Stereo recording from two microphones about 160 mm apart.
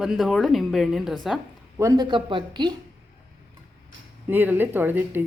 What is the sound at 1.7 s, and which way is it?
Speech, 20° right (ahead or behind).